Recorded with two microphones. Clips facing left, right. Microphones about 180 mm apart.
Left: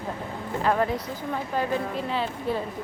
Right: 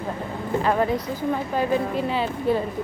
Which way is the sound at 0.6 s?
Centre (ahead or behind).